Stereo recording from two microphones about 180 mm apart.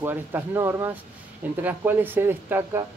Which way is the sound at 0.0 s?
10° right (ahead or behind).